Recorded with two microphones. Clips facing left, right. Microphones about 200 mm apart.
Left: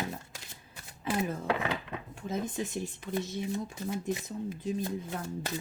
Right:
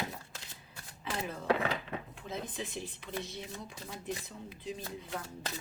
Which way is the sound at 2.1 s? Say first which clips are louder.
Left 6 dB; 45° left (ahead or behind).